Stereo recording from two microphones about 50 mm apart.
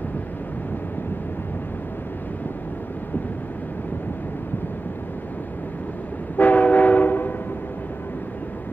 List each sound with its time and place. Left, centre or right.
6.3 s train: left